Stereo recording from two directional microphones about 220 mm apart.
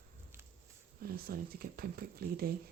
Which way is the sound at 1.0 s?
45° right (ahead or behind).